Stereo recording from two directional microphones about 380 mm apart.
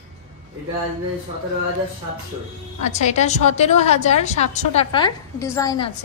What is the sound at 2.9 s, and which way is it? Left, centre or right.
A woman's voice, centre.